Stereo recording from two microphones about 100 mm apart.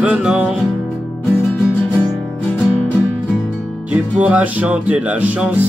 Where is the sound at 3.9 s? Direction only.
15° right (ahead or behind).